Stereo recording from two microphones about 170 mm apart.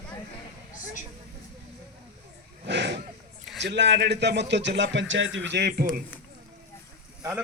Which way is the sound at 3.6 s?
90° right.